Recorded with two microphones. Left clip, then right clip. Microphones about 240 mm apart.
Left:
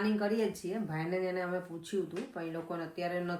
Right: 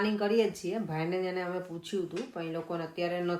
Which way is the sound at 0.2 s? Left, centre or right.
Right.